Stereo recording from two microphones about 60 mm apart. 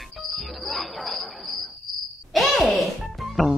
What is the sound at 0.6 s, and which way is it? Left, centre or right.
Music, centre.